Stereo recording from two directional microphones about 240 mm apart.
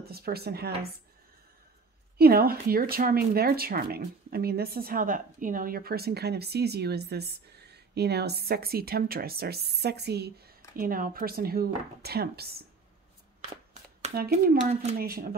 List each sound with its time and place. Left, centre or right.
0.0 s speech: right
2.1 s speech: right
14.1 s speech: right